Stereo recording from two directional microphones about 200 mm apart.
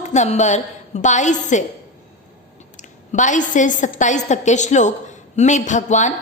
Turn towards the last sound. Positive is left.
turn(degrees=35)  # may be behind; listen again after turning